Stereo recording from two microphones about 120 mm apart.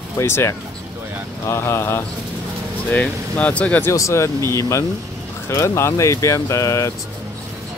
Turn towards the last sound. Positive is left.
turn(degrees=25)  # may be behind; listen again after turning